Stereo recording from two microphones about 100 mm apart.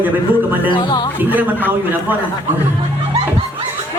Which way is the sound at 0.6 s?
50° left (ahead or behind).